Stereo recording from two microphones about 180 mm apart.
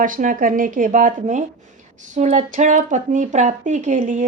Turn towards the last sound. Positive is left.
turn(degrees=-45)  # may be behind; listen again after turning